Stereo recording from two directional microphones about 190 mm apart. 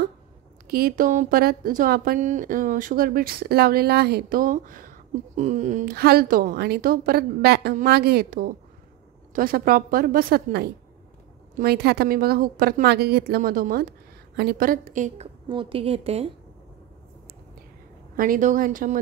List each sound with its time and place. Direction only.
0.7 s speech: 50° right (ahead or behind)
5.9 s speech: 55° right (ahead or behind)
15.4 s a woman's voice: 25° right (ahead or behind)
18.1 s speech: 50° right (ahead or behind)